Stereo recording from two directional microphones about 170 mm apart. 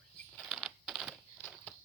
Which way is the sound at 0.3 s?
Centre (ahead or behind).